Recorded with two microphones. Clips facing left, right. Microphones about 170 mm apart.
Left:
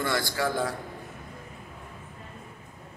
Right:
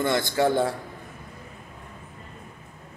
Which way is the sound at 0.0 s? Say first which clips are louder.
Right 5 dB; 20° right (ahead or behind).